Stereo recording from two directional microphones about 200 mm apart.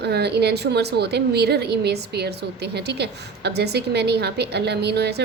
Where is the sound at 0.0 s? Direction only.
55° right (ahead or behind).